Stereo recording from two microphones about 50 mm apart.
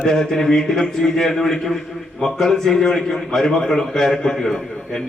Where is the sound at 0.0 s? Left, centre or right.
Centre.